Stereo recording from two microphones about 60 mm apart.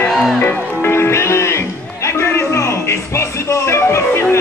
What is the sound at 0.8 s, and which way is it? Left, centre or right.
Music, left.